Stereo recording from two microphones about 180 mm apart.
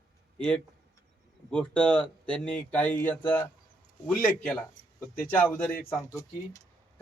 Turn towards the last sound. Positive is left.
turn(degrees=15)  # may be behind; listen again after turning